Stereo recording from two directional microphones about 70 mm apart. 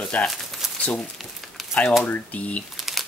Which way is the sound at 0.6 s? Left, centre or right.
Centre.